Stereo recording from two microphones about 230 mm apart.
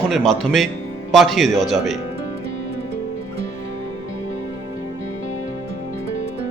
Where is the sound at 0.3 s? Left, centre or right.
Centre.